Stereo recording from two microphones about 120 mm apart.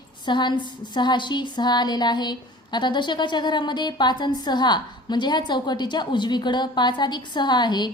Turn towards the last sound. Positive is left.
turn(degrees=40)  # may be behind; listen again after turning